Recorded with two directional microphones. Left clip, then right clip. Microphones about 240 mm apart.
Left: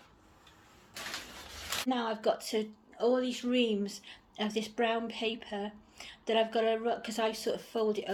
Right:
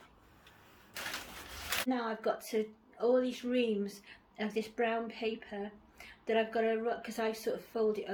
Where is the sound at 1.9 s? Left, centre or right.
Left.